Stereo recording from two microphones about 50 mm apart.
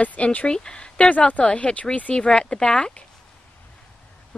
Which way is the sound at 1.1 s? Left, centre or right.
Left.